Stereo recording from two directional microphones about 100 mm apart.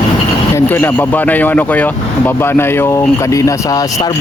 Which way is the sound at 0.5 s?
20° left (ahead or behind).